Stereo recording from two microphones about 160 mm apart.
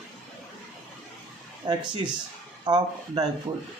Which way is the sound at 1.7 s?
25° right (ahead or behind).